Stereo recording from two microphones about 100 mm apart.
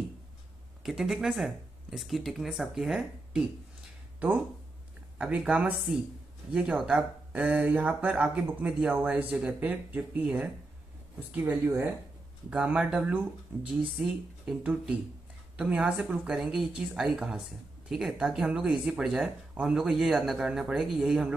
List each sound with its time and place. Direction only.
0.8 s speech: 5° right (ahead or behind)
5.2 s speech: 10° right (ahead or behind)
12.4 s speech: 10° right (ahead or behind)
13.7 s speech: 5° right (ahead or behind)